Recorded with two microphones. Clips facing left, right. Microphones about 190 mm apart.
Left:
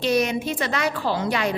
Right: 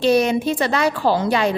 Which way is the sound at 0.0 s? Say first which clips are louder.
Right 5 dB; 30° right (ahead or behind).